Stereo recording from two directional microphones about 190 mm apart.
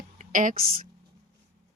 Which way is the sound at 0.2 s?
45° right (ahead or behind).